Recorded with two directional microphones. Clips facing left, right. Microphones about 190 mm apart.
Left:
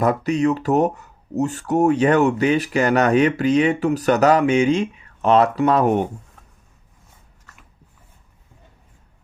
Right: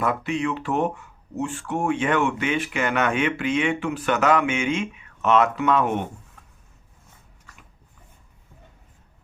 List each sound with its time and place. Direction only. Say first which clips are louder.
0.0 s speech: left 6 dB; 40° left (ahead or behind)